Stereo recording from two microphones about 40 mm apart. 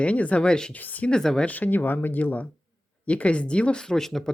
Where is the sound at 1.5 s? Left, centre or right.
Left.